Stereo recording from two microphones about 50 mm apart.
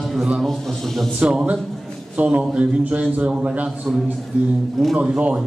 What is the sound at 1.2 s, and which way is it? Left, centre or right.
A man's voice, right.